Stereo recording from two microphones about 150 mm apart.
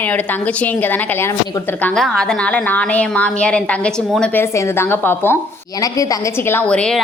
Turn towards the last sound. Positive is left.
turn(degrees=5)  # may be behind; listen again after turning